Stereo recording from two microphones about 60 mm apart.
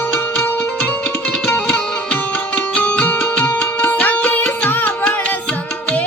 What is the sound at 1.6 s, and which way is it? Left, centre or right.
Music, centre.